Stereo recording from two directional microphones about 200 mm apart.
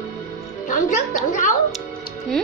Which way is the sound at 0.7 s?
40° left (ahead or behind).